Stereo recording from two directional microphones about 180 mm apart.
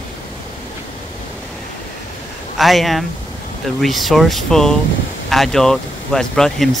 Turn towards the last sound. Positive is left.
turn(degrees=5)  # may be behind; listen again after turning